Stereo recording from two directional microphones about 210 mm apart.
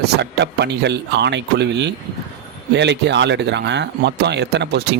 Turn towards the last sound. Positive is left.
turn(degrees=-55)  # may be behind; listen again after turning